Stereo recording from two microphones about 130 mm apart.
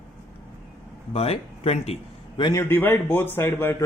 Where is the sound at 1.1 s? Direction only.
50° left (ahead or behind).